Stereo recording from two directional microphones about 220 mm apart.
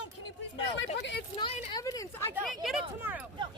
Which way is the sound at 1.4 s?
25° left (ahead or behind).